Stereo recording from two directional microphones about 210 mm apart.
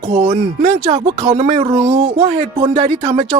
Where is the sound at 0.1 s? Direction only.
30° right (ahead or behind).